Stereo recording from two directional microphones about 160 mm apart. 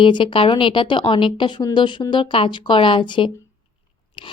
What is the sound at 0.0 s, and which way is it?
A woman's voice, 30° left (ahead or behind).